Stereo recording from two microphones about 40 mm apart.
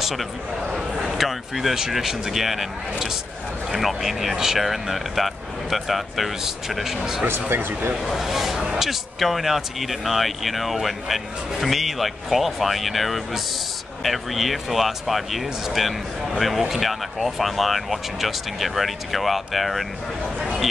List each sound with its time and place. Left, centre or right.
0.0 s a man's voice: centre
7.2 s speech: right
8.0 s speech: centre